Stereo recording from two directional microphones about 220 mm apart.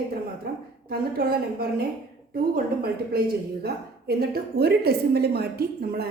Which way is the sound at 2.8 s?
45° right (ahead or behind).